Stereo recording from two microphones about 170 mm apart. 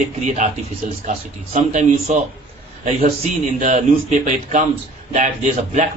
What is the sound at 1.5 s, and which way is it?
Speech, 45° right (ahead or behind).